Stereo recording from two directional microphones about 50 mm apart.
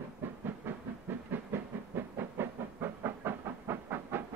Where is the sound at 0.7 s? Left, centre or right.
Right.